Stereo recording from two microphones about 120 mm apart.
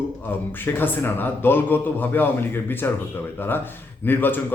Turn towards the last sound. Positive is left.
turn(degrees=15)  # may be behind; listen again after turning